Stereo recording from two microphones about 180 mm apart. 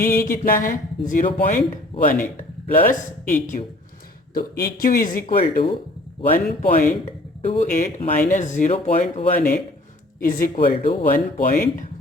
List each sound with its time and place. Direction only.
0.0 s speech: 50° left (ahead or behind)